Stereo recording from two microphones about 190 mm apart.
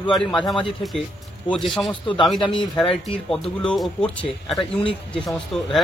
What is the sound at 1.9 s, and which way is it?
Speech, 25° left (ahead or behind).